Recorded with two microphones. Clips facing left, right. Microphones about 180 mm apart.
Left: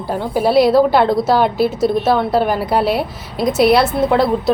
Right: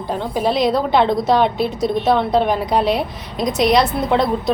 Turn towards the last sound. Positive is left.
turn(degrees=5)  # may be behind; listen again after turning